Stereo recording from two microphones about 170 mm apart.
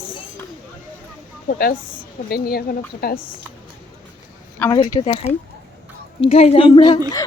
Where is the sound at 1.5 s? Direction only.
60° left (ahead or behind).